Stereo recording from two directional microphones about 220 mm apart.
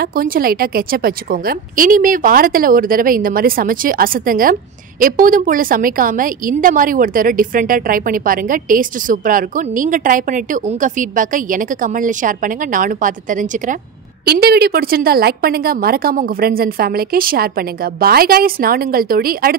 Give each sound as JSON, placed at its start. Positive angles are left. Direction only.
{"t": 0.0, "sound": "a woman's voice", "side_deg": -40}